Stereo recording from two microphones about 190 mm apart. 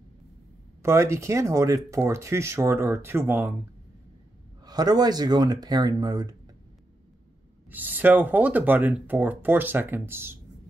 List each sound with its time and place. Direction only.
0.8 s speech: 15° right (ahead or behind)
4.6 s speech: 20° right (ahead or behind)
7.7 s speech: 10° right (ahead or behind)